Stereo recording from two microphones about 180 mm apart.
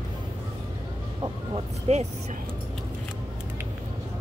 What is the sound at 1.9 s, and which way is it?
Speech, 40° right (ahead or behind).